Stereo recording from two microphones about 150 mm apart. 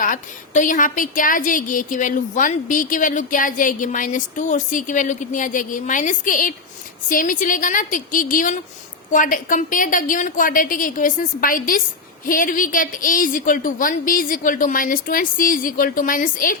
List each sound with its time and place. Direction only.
0.0 s a woman's voice: 60° left (ahead or behind)